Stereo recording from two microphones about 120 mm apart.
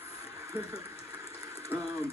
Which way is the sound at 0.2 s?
25° right (ahead or behind).